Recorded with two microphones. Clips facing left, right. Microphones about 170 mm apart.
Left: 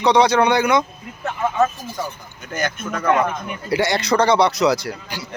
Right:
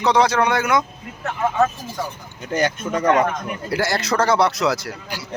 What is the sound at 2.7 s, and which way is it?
Speech, 20° right (ahead or behind).